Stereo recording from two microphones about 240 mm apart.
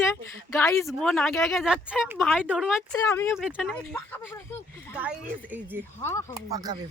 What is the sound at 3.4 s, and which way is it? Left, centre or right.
Speech, centre.